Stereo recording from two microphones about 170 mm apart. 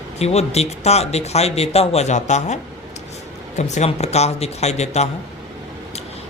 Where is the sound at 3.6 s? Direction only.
40° left (ahead or behind).